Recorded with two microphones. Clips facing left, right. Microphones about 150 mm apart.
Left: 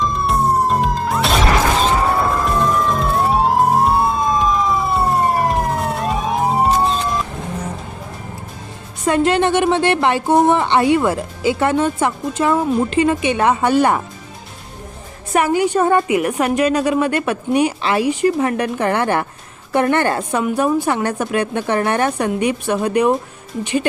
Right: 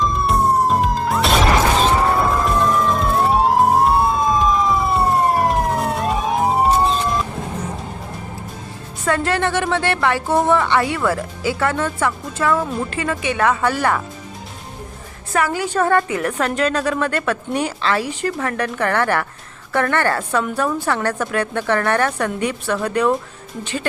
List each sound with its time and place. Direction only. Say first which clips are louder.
0.0 s police car: even; centre (ahead or behind)
9.0 s a woman's voice: left 4 dB; 20° left (ahead or behind)
15.3 s a woman's voice: left 5 dB; 20° left (ahead or behind)